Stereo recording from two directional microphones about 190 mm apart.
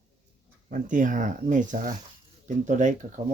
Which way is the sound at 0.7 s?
45° right (ahead or behind).